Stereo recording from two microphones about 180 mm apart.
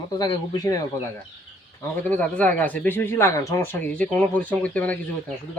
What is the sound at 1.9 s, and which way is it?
Speech, 10° left (ahead or behind).